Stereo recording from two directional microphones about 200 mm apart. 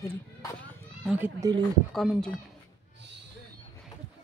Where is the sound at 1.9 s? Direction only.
Centre (ahead or behind).